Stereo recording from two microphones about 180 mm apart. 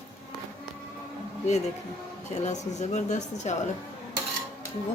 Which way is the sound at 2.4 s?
40° left (ahead or behind).